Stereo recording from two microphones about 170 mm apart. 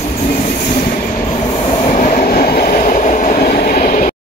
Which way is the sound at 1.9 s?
50° left (ahead or behind).